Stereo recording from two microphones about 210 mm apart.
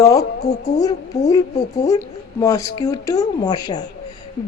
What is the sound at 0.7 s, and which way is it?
Speech, 15° left (ahead or behind).